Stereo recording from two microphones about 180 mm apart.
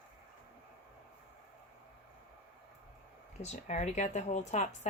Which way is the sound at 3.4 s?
40° left (ahead or behind).